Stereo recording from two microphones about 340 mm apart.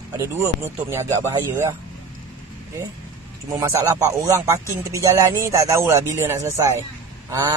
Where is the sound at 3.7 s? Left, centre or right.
Centre.